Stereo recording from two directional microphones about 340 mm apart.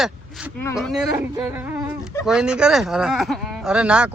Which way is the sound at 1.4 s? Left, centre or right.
Centre.